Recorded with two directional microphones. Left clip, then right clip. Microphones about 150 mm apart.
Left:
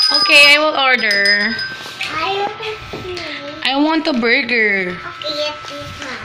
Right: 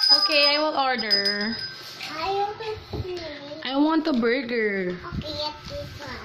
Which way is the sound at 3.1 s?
20° right (ahead or behind).